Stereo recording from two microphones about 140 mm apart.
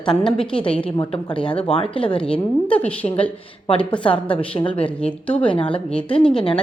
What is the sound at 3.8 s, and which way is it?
Speech, 10° left (ahead or behind).